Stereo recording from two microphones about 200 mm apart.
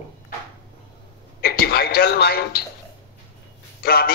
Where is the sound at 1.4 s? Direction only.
50° left (ahead or behind).